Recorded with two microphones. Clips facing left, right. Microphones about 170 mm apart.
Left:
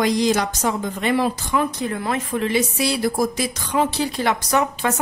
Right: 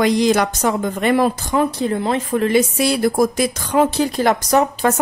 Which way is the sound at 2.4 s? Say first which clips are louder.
Right 5 dB; 50° right (ahead or behind).